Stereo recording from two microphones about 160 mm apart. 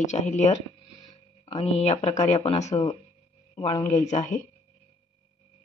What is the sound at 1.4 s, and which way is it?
Speech, 35° left (ahead or behind).